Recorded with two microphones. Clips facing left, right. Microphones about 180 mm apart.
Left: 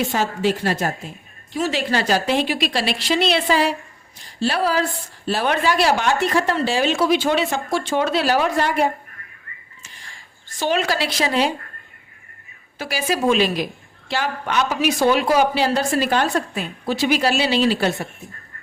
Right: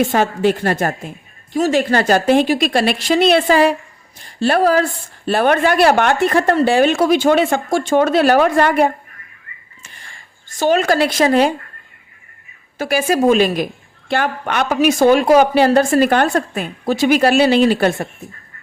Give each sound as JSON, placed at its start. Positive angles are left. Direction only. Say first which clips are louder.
{"t": 0.0, "sound": "a woman's voice", "louder": "right 6 dB", "side_deg": -55}
{"t": 10.6, "sound": "speech", "louder": "right 7 dB", "side_deg": -45}
{"t": 12.8, "sound": "speech", "louder": "right 6 dB", "side_deg": -50}